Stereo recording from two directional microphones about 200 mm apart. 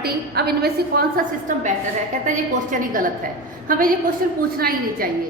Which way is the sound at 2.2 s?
40° right (ahead or behind).